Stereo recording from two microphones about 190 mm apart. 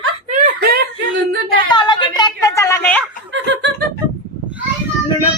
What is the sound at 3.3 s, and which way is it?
Snicker, 70° right (ahead or behind).